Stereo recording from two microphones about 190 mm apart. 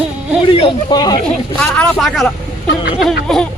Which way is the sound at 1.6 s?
5° left (ahead or behind).